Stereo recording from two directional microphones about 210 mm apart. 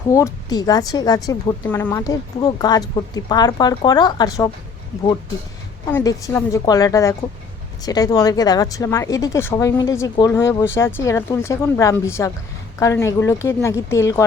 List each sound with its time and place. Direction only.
0.1 s speech: 15° left (ahead or behind)
5.9 s speech: 15° left (ahead or behind)